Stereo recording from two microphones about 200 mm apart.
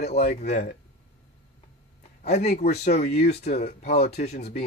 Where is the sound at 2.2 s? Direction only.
35° left (ahead or behind).